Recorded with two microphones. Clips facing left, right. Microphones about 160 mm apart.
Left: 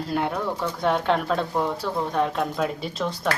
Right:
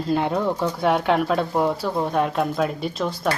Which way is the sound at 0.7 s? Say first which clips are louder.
Right 1 dB; 10° right (ahead or behind).